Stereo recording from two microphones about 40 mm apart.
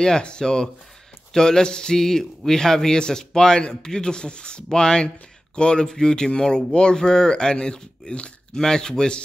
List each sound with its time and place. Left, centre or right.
0.0 s a man's voice: left